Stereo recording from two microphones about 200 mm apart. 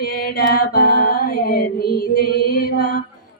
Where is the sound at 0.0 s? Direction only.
50° left (ahead or behind).